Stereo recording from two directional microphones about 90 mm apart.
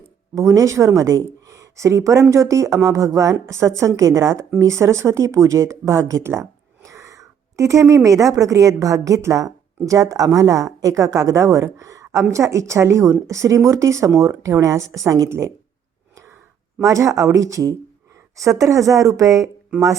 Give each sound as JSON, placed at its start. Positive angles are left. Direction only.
{"t": 0.3, "sound": "a woman's voice", "side_deg": -40}
{"t": 16.8, "sound": "speech", "side_deg": -35}